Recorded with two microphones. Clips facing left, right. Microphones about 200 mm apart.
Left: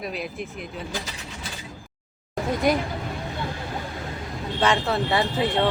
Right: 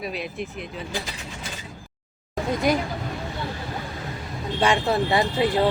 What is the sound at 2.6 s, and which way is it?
Speech, centre (ahead or behind).